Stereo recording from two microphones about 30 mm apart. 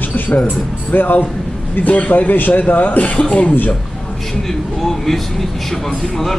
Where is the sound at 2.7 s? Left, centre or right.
Left.